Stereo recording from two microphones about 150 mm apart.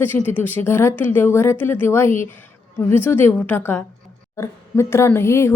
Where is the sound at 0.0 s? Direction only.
15° left (ahead or behind).